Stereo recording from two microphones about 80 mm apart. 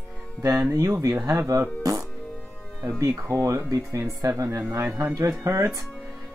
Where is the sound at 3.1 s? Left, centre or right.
Right.